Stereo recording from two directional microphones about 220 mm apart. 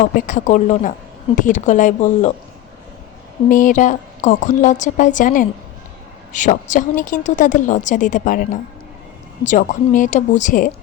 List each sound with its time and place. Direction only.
0.3 s speech: 35° left (ahead or behind)
3.5 s speech: 35° left (ahead or behind)